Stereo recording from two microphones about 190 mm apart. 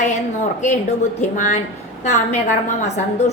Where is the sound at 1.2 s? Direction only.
40° left (ahead or behind).